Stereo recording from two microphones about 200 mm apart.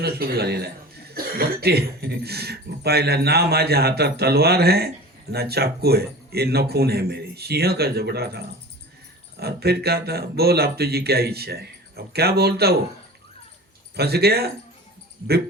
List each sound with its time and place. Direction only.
0.0 s speech: 50° right (ahead or behind)
13.9 s speech: 55° right (ahead or behind)